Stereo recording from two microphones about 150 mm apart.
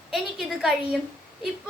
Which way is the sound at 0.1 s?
5° right (ahead or behind).